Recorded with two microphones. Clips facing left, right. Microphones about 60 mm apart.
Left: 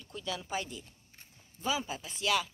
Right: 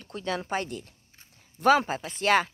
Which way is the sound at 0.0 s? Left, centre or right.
Right.